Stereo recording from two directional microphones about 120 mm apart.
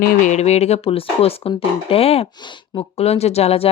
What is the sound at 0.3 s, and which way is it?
Speech, 65° left (ahead or behind).